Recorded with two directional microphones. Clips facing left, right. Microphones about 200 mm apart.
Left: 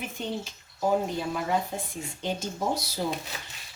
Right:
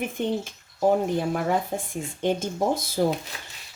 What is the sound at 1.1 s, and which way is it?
Speech, 55° right (ahead or behind).